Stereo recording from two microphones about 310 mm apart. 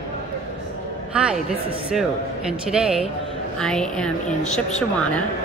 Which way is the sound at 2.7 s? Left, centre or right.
Centre.